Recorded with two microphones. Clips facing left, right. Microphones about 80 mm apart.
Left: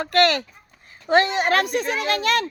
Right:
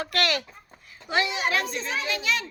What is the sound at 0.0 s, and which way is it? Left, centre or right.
A woman's voice, left.